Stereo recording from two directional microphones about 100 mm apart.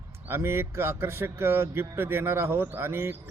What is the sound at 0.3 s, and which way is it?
A man's voice, 25° right (ahead or behind).